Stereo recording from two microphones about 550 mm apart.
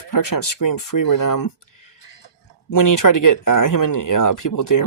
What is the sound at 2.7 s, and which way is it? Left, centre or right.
Speech, left.